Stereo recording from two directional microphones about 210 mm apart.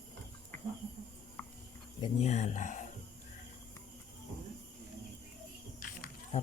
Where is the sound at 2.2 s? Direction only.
35° left (ahead or behind).